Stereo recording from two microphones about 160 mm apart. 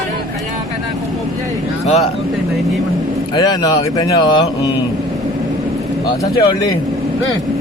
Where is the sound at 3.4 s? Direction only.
25° left (ahead or behind).